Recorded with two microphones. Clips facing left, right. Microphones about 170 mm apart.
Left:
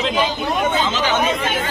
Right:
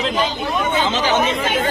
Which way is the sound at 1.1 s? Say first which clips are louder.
Right 1 dB; 35° right (ahead or behind).